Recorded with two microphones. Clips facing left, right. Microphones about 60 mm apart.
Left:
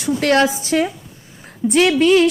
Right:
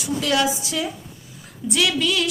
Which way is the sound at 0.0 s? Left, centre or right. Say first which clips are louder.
Left 6 dB; left.